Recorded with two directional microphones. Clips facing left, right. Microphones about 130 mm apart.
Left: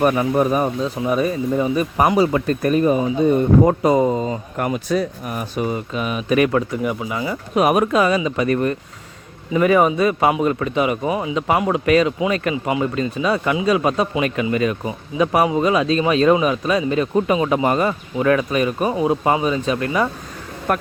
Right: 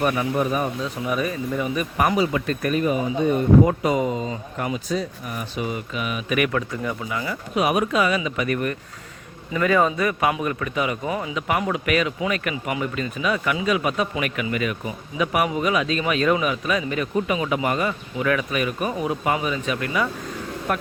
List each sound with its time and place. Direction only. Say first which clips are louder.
0.0 s speech: left 5 dB; 40° left (ahead or behind)
4.5 s speech: left 5 dB; 55° left (ahead or behind)
5.4 s speech: left 5 dB; 45° left (ahead or behind); by 7.3 s 20° left (ahead or behind)
7.5 s speech: left 5 dB; 50° left (ahead or behind)
20.7 s speech: left 5 dB; 45° left (ahead or behind)